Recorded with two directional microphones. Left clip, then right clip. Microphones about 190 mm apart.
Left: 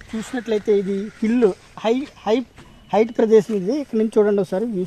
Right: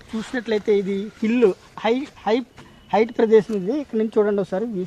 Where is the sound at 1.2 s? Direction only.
50° left (ahead or behind).